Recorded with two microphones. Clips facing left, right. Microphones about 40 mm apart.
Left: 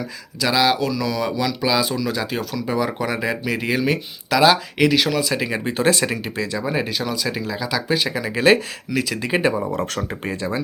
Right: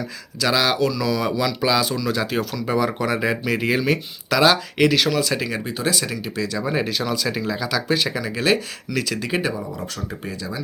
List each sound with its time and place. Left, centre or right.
0.3 s speech: centre
5.4 s speech: centre
5.6 s speech: left
6.6 s speech: centre
8.2 s speech: centre
9.6 s speech: left